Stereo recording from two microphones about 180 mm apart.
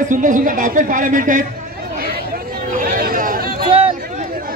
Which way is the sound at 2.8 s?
50° right (ahead or behind).